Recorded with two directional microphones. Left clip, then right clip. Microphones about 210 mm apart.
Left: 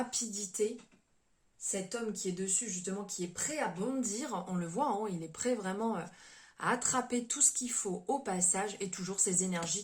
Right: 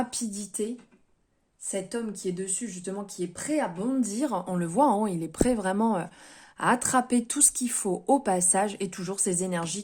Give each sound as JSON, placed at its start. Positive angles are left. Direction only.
{"t": 0.1, "sound": "a woman's voice", "side_deg": -50}
{"t": 1.6, "sound": "a woman's voice", "side_deg": -50}